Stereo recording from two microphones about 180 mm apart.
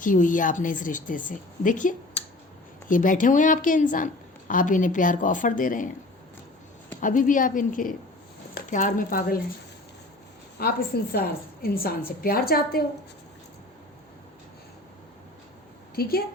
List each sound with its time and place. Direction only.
0.0 s a woman's voice: 45° left (ahead or behind)
7.0 s a woman's voice: 45° left (ahead or behind)
10.6 s a woman's voice: 55° left (ahead or behind)
16.0 s a woman's voice: 60° left (ahead or behind)